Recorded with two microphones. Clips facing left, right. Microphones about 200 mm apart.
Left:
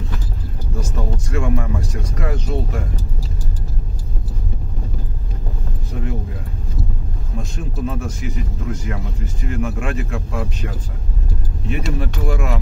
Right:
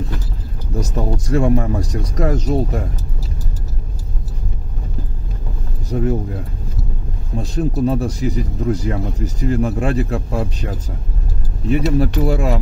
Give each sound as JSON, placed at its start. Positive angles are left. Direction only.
{"t": 0.7, "sound": "speech", "side_deg": -35}
{"t": 5.9, "sound": "speech", "side_deg": -40}
{"t": 7.3, "sound": "speech", "side_deg": -35}
{"t": 11.7, "sound": "speech", "side_deg": -35}